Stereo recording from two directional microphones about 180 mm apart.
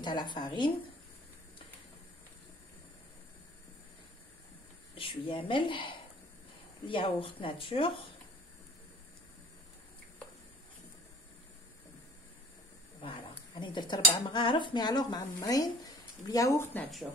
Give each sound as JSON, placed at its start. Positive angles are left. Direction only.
{"t": 0.0, "sound": "speech", "side_deg": 25}
{"t": 4.9, "sound": "speech", "side_deg": 30}
{"t": 13.0, "sound": "cutlery", "side_deg": 30}